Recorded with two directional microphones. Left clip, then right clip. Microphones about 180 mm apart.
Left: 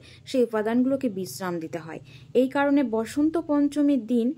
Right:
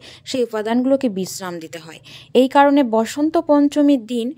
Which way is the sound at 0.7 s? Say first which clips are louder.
Right 7 dB; 40° right (ahead or behind).